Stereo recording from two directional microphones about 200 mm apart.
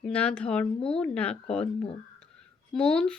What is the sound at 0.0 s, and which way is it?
A woman's voice, 5° left (ahead or behind).